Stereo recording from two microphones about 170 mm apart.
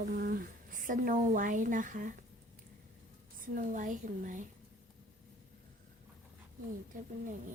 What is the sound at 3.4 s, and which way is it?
A woman's voice, 50° right (ahead or behind).